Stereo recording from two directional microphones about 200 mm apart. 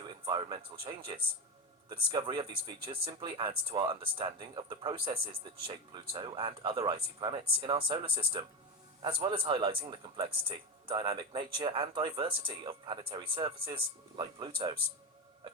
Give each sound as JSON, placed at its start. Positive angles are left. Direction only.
{"t": 0.0, "sound": "speech", "side_deg": -20}